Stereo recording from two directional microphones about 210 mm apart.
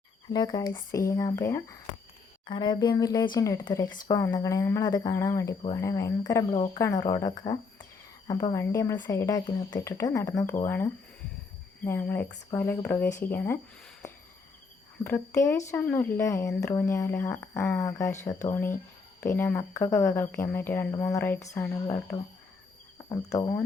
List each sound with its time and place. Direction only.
0.3 s speech: 20° left (ahead or behind)
15.0 s speech: 10° left (ahead or behind)
23.0 s speech: 15° left (ahead or behind)